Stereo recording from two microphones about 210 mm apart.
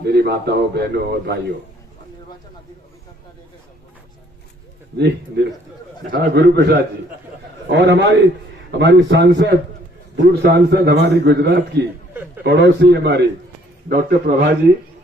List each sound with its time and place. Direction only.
0.0 s a man's voice: 50° right (ahead or behind)
4.9 s a man's voice: 50° right (ahead or behind)